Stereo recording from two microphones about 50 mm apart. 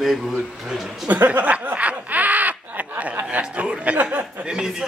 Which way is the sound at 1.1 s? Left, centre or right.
Right.